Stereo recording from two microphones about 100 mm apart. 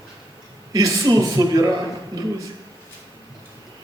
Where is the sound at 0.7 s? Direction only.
35° right (ahead or behind).